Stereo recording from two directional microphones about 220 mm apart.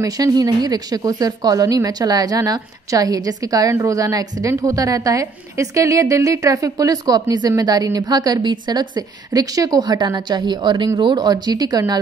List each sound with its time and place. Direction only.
0.0 s a woman's voice: 15° right (ahead or behind)